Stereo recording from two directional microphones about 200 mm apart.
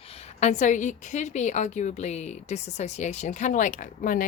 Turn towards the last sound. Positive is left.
turn(degrees=40)  # may be behind; listen again after turning